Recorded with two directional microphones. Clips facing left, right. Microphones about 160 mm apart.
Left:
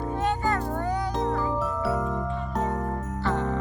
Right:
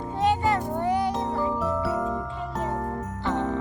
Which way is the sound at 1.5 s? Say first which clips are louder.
Right 1 dB; centre (ahead or behind).